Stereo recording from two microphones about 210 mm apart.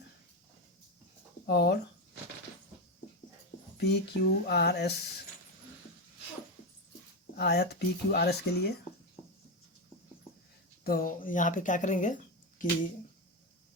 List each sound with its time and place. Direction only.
1.5 s speech: 50° left (ahead or behind)
3.8 s speech: 55° left (ahead or behind)
7.3 s speech: 50° left (ahead or behind)
10.8 s speech: 45° left (ahead or behind)